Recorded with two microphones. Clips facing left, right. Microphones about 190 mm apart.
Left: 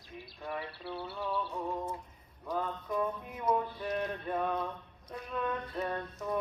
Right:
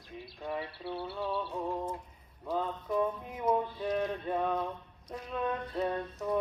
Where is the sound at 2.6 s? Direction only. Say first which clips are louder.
Right 2 dB; 15° right (ahead or behind).